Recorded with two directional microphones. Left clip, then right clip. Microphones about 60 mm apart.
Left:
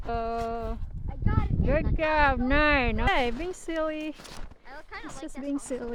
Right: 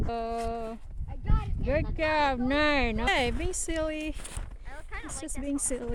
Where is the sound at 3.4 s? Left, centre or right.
Right.